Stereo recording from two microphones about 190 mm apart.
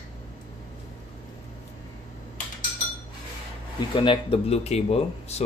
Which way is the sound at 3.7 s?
25° left (ahead or behind).